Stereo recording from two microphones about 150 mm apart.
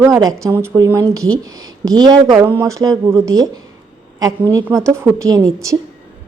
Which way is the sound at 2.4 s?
15° right (ahead or behind).